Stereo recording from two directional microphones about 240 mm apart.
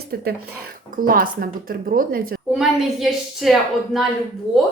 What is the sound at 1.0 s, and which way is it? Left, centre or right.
Speech, right.